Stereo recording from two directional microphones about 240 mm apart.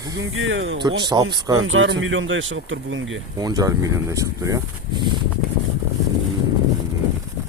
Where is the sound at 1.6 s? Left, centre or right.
Right.